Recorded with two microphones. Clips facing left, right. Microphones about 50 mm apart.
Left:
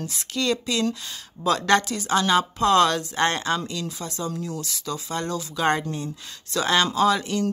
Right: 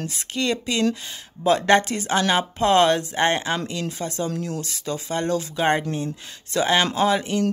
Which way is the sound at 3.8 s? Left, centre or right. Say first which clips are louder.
Right 4 dB; right.